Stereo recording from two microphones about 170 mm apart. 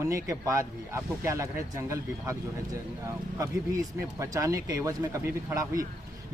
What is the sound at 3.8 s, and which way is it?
Speech, 20° right (ahead or behind).